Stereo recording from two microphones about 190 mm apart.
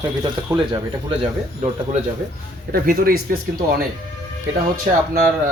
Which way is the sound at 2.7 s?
50° right (ahead or behind).